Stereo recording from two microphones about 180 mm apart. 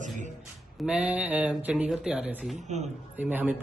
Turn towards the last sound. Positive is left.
turn(degrees=-10)  # may be behind; listen again after turning